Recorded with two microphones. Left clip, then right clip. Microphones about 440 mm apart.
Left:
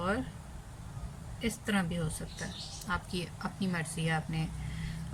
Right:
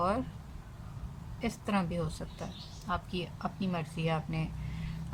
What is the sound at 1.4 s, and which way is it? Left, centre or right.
A woman's voice, centre.